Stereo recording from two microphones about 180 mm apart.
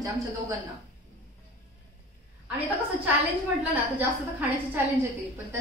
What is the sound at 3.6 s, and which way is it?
Speech, 10° right (ahead or behind).